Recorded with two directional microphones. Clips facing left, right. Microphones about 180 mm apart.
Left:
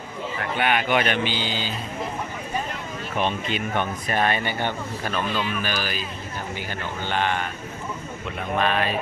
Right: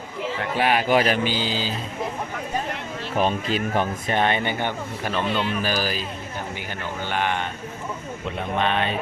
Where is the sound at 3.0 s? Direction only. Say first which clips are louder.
Right 3 dB; 35° right (ahead or behind); by 5.3 s 15° right (ahead or behind).